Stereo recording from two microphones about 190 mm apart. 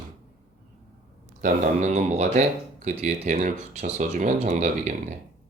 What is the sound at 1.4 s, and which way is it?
Speech, 45° right (ahead or behind).